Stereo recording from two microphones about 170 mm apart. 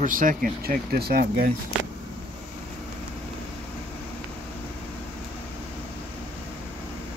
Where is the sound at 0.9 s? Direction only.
65° right (ahead or behind).